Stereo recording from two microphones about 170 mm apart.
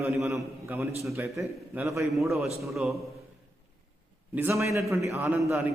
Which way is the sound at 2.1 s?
Centre (ahead or behind).